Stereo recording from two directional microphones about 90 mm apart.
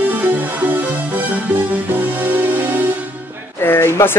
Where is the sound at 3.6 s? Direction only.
25° left (ahead or behind).